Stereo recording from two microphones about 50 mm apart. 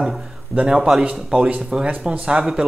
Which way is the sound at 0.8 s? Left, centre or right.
Centre.